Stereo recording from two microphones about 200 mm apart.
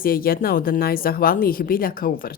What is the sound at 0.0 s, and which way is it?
Speech, 45° left (ahead or behind).